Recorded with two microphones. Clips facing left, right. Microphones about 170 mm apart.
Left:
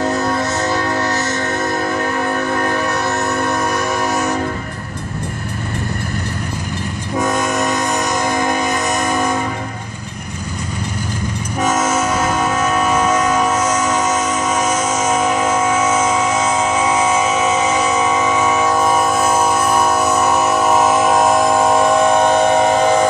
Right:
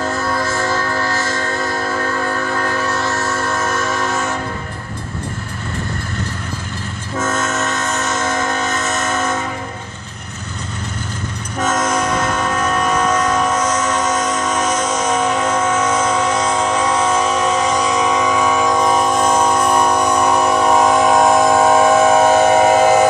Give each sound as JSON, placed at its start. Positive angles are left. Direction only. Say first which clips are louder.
{"t": 0.0, "sound": "music", "louder": "left 2 dB", "side_deg": 20}
{"t": 7.2, "sound": "train", "louder": "left 3 dB", "side_deg": 15}
{"t": 11.6, "sound": "train horn", "louder": "left 1 dB", "side_deg": 10}